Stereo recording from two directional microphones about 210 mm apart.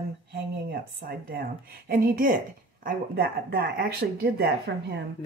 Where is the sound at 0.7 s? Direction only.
45° right (ahead or behind).